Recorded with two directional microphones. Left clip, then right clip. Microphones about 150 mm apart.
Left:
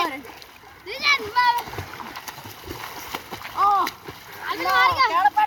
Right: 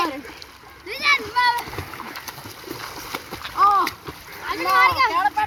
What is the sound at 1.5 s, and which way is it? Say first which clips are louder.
Splash: left 1 dB; 10° left (ahead or behind).